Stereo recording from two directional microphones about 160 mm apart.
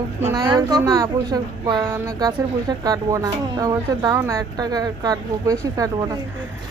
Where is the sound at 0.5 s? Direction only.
25° right (ahead or behind).